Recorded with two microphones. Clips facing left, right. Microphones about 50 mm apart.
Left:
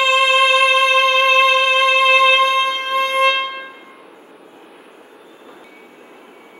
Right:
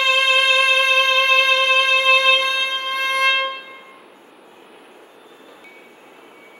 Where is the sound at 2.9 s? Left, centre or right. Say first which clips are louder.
Left 4 dB; centre.